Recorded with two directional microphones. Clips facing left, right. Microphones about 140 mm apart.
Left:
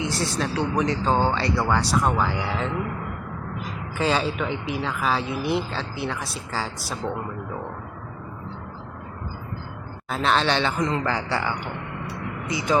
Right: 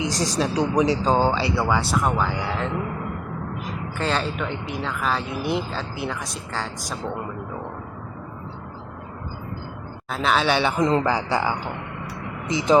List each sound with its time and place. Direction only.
0.1 s speech: 40° right (ahead or behind)
0.3 s speech: 15° right (ahead or behind)
3.9 s speech: 5° left (ahead or behind)
10.1 s a man's voice: 5° right (ahead or behind); by 12.8 s 20° right (ahead or behind)